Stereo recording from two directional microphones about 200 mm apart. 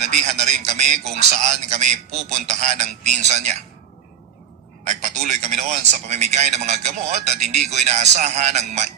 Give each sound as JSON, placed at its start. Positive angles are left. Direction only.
{"t": 0.0, "sound": "speech", "side_deg": -35}
{"t": 4.9, "sound": "speech", "side_deg": -35}